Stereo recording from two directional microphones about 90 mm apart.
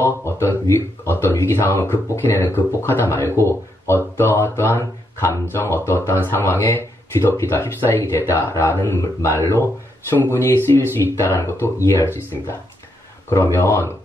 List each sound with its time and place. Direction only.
0.0 s speech: 30° left (ahead or behind)